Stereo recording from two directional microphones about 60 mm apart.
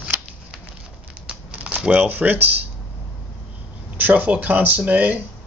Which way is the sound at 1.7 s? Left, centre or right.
Right.